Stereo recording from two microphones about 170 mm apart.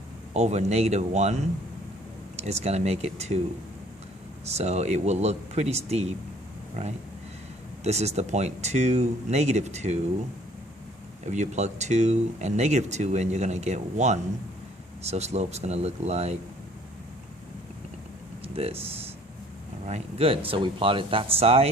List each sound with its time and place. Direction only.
0.3 s speech: 40° right (ahead or behind)
4.4 s speech: 40° right (ahead or behind)
7.9 s speech: 40° right (ahead or behind)
11.3 s speech: 40° right (ahead or behind)
18.4 s speech: 35° right (ahead or behind)
19.8 s speech: 40° right (ahead or behind)